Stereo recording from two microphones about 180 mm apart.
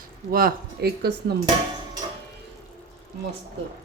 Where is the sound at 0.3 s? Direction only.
55° right (ahead or behind).